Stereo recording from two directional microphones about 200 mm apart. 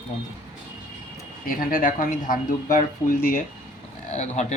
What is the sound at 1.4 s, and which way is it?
Speech, 45° left (ahead or behind).